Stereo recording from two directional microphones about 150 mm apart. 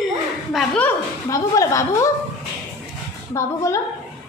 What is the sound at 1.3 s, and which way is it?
Speech, 20° left (ahead or behind).